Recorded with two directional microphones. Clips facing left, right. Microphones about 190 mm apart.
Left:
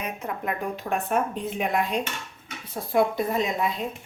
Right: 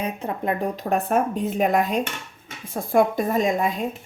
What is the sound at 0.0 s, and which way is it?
A woman's voice, 30° right (ahead or behind).